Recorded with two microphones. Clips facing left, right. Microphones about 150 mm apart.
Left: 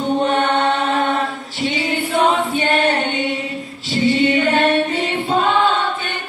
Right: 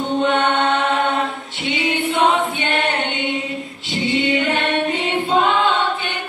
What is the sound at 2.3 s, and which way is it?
Singing, 40° left (ahead or behind).